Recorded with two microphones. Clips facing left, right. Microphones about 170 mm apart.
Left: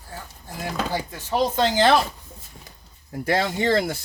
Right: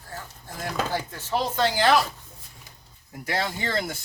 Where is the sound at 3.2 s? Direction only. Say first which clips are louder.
Left 6 dB; 25° left (ahead or behind).